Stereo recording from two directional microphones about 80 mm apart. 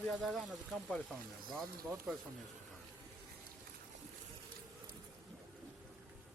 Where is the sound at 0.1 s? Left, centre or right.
Centre.